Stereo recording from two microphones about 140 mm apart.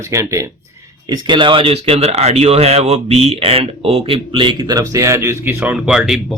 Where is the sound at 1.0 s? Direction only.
30° right (ahead or behind).